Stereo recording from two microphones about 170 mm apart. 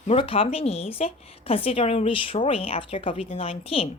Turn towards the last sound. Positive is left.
turn(degrees=35)  # may be behind; listen again after turning